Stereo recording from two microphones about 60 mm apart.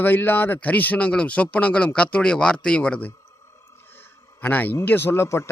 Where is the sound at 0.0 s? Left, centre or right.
Left; by 3.1 s centre.